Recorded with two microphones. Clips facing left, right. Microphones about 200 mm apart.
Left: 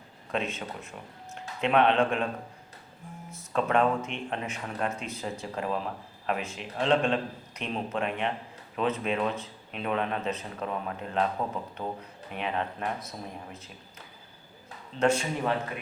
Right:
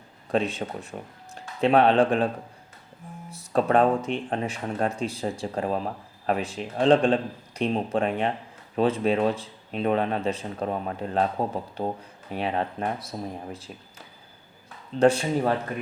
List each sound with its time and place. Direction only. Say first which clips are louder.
0.3 s speech: right 6 dB; 35° right (ahead or behind)
3.3 s speech: right 5 dB; 35° right (ahead or behind)
14.9 s speech: right 6 dB; 35° right (ahead or behind)